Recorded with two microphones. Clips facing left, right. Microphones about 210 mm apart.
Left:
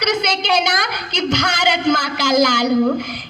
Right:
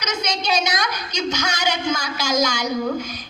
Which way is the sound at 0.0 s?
60° left (ahead or behind).